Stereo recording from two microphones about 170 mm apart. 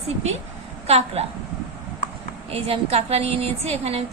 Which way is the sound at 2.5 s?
35° right (ahead or behind).